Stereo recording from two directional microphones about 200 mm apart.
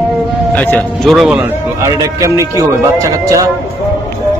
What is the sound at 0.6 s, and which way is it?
A man's voice, 5° left (ahead or behind).